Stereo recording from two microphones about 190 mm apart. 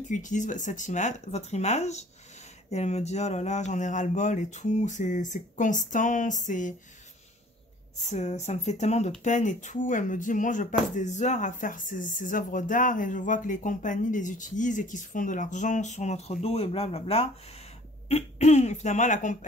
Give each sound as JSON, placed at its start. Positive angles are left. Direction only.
{"t": 0.1, "sound": "speech", "side_deg": 40}
{"t": 8.0, "sound": "speech", "side_deg": 35}